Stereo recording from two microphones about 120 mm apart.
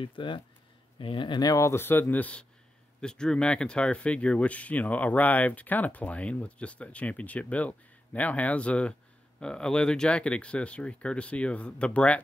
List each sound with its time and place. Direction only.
0.0 s speech: 45° left (ahead or behind); by 12.2 s 10° left (ahead or behind)